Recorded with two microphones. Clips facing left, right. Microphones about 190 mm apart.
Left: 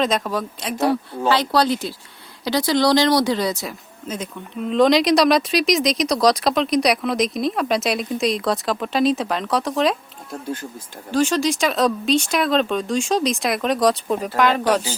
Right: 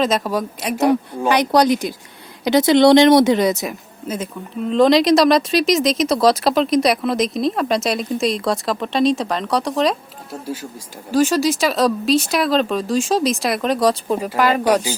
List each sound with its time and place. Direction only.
0.2 s speech: 10° right (ahead or behind)
4.7 s speech: centre (ahead or behind)